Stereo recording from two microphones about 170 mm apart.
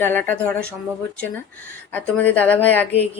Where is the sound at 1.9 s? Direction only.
10° left (ahead or behind).